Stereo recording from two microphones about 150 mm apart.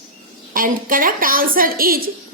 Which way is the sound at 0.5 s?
70° right (ahead or behind).